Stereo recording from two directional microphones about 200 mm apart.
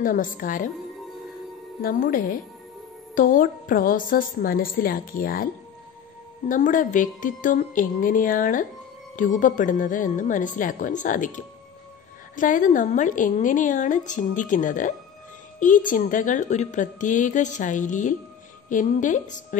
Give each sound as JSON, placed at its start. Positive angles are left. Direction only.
{"t": 0.0, "sound": "a woman's voice", "side_deg": 45}
{"t": 1.8, "sound": "a woman's voice", "side_deg": 45}
{"t": 6.5, "sound": "a woman's voice", "side_deg": 40}